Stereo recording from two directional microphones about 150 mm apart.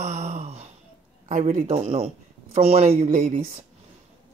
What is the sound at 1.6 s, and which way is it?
A man's voice, 40° right (ahead or behind).